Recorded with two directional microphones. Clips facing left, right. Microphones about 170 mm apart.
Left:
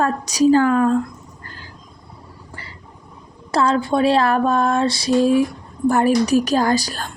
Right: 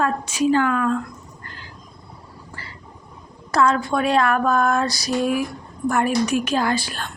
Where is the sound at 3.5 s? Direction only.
30° left (ahead or behind).